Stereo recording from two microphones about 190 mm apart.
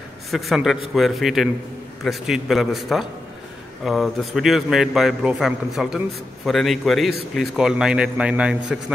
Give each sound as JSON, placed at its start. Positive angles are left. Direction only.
{"t": 0.3, "sound": "a man's voice", "side_deg": 0}